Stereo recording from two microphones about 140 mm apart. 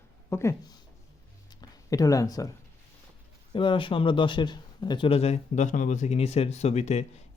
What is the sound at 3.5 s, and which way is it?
Speech, 35° left (ahead or behind).